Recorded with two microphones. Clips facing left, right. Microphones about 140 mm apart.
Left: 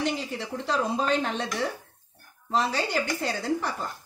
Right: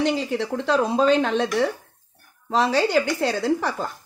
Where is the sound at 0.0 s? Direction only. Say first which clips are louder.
Right 7 dB; 85° right.